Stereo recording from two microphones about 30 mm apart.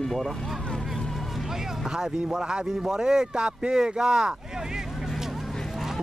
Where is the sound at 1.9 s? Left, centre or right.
Right.